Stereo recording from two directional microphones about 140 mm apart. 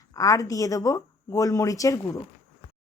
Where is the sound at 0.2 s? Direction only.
25° left (ahead or behind).